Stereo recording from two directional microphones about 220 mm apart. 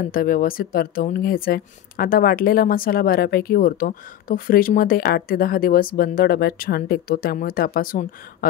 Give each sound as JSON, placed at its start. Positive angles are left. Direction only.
{"t": 0.0, "sound": "speech", "side_deg": 40}